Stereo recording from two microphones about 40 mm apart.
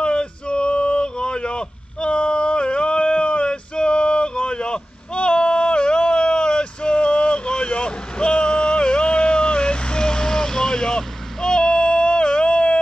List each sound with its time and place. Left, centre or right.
0.0 s male singing: left